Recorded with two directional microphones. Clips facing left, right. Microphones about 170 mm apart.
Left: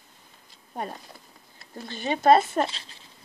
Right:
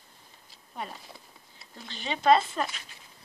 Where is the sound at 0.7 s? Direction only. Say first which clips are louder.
Left 5 dB; 45° left (ahead or behind).